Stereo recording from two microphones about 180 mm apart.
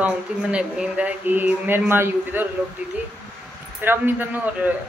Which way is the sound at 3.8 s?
10° right (ahead or behind).